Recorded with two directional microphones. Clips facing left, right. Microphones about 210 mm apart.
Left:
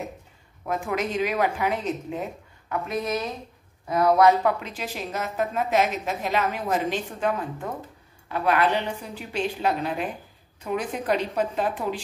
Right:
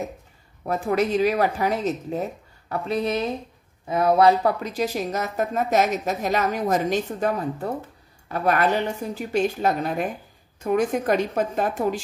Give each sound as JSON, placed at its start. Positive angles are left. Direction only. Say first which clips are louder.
{"t": 0.7, "sound": "a woman's voice", "louder": "right 5 dB", "side_deg": -40}